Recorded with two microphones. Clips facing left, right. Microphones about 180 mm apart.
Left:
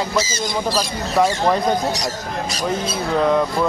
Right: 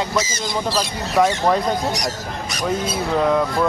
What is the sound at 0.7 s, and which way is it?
Speech, 5° left (ahead or behind).